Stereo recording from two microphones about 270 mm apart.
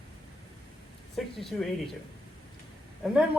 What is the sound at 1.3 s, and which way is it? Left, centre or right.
Speech, centre.